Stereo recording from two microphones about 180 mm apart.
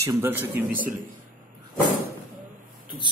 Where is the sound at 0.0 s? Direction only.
15° right (ahead or behind).